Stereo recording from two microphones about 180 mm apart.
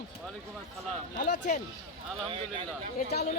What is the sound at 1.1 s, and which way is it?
Speech, 45° left (ahead or behind).